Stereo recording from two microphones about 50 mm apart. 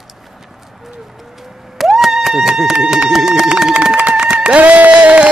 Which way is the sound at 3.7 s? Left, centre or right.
Right.